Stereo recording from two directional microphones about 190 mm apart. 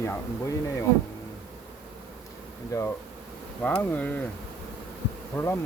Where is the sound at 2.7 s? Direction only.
15° left (ahead or behind).